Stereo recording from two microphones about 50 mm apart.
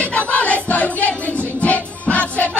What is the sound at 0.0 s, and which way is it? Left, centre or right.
Music, left.